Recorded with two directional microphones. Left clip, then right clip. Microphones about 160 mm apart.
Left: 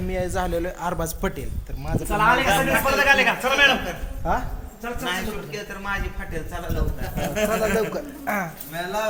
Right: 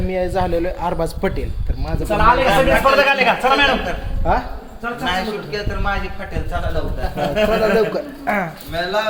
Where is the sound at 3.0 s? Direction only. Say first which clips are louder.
Right 4 dB; 70° right (ahead or behind).